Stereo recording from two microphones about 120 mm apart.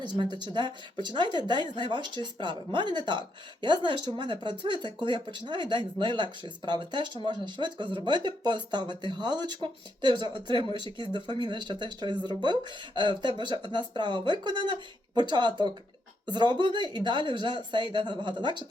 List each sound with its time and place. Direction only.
0.0 s speech: 40° right (ahead or behind)